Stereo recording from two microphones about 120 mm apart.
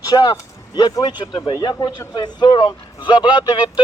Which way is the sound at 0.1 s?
35° left (ahead or behind).